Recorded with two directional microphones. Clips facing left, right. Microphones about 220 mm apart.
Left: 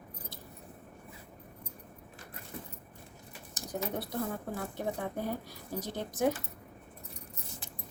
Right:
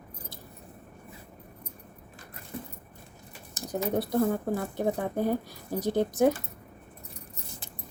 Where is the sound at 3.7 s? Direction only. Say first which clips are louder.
Right 8 dB; 40° right (ahead or behind).